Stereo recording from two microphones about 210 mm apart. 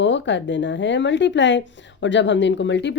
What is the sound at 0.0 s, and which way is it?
Speech, 60° left (ahead or behind).